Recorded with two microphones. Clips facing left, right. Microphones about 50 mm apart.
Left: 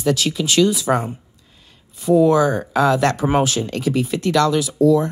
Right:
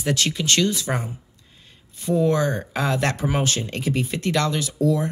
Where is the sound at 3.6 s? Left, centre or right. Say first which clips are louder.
Left 5 dB; centre.